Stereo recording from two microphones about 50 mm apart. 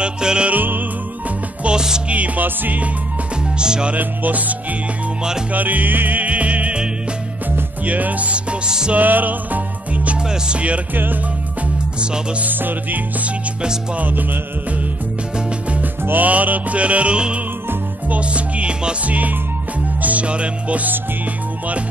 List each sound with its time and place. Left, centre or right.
0.0 s music: centre
0.5 s music: right
1.6 s music: centre
2.0 s music: right
3.5 s music: centre
3.9 s music: right
7.8 s music: right; by 8.9 s centre
8.9 s music: right
10.2 s music: centre
12.0 s music: centre
12.4 s music: right
15.8 s music: right